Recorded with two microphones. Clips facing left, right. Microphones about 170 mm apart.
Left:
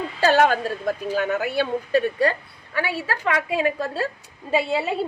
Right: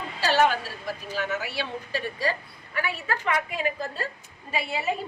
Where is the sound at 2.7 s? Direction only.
80° left.